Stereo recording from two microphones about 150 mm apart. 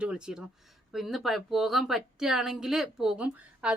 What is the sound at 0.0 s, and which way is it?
A woman's voice, 5° right (ahead or behind).